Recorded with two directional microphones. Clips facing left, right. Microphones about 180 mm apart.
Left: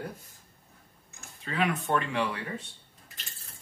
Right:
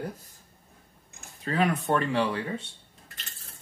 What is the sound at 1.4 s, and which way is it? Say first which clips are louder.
Speech: right 3 dB; 40° right (ahead or behind).